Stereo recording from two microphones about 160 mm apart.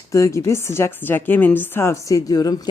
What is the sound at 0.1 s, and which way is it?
A woman's voice, 20° left (ahead or behind).